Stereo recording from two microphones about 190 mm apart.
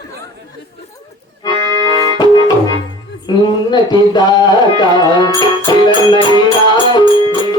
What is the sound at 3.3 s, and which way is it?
Speech, 25° left (ahead or behind).